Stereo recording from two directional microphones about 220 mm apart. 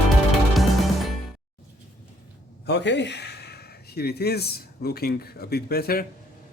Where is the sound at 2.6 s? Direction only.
55° left (ahead or behind).